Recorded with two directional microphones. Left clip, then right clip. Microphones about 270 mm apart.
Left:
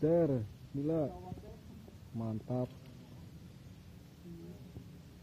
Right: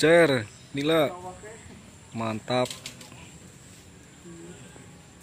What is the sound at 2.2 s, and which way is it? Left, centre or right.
Speech, right.